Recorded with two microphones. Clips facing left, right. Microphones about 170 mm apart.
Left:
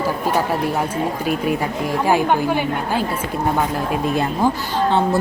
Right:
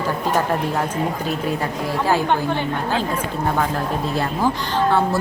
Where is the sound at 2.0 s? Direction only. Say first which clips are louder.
Left 2 dB; 15° left (ahead or behind).